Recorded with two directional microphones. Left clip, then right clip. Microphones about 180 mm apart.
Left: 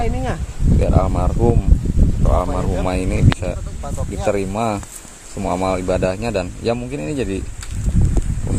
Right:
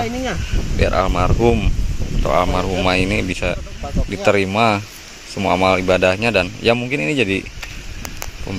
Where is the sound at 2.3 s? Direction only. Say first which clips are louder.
Right 5 dB; 10° right (ahead or behind).